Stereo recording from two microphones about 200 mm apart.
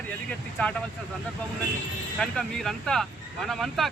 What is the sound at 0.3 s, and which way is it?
Speech, 5° left (ahead or behind).